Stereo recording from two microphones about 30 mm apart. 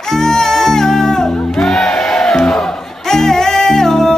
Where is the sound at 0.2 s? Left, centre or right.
Centre.